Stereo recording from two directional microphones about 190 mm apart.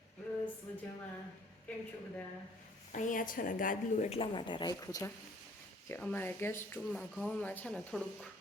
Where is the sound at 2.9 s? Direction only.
40° left (ahead or behind); by 6.7 s 10° left (ahead or behind).